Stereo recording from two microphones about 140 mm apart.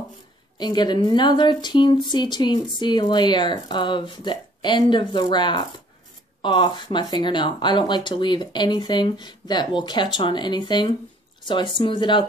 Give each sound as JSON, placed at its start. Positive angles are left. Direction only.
{"t": 0.6, "sound": "a woman's voice", "side_deg": 30}